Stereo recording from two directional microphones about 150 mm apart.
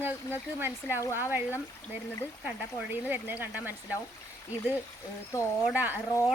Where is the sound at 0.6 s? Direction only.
15° right (ahead or behind).